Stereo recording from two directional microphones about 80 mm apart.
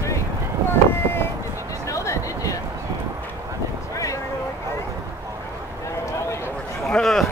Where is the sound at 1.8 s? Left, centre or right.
Left.